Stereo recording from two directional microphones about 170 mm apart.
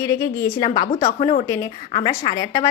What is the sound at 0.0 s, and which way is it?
A woman's voice, 20° left (ahead or behind).